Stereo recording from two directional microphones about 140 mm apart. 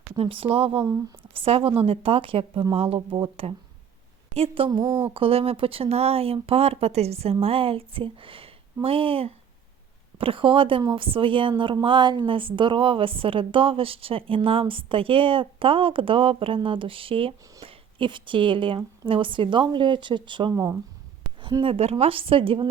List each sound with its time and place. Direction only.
0.2 s a woman's voice: 40° right (ahead or behind)
4.9 s speech: 15° right (ahead or behind)
5.1 s a woman's voice: 40° right (ahead or behind)
20.5 s speech: 25° right (ahead or behind)
21.4 s a woman's voice: 35° right (ahead or behind)